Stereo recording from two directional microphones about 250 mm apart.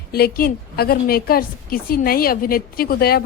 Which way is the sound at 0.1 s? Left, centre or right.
Left.